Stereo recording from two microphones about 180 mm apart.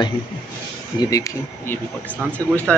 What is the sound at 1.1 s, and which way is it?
Speech, 20° left (ahead or behind).